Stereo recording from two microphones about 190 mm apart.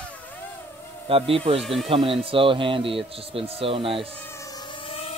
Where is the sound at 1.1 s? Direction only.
30° right (ahead or behind).